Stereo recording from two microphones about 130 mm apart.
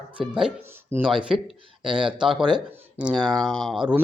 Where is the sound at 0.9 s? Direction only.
15° right (ahead or behind).